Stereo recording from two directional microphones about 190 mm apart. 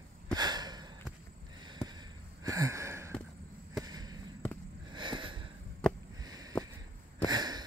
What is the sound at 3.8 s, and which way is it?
Basketball bounce, 20° right (ahead or behind).